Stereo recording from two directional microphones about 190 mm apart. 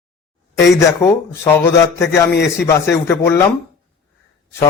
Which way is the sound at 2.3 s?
65° left (ahead or behind).